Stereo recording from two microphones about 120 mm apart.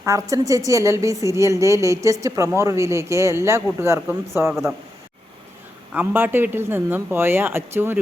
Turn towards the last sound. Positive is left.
turn(degrees=-20)  # may be behind; listen again after turning